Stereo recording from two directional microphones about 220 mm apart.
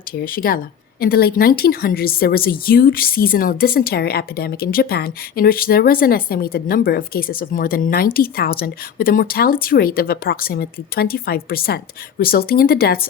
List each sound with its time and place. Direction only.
0.1 s speech: 40° left (ahead or behind)